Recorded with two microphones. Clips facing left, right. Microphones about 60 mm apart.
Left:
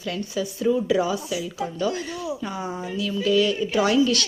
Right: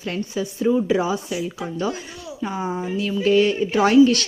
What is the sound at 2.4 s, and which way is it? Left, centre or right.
Speech, centre.